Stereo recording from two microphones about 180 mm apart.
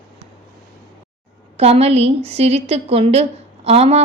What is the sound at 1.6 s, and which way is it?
A woman's voice, 35° right (ahead or behind).